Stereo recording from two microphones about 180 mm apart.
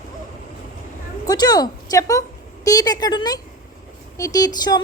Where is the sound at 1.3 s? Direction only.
20° left (ahead or behind).